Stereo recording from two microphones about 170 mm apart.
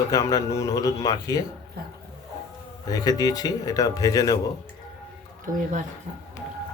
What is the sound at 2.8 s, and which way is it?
Speech, 20° left (ahead or behind).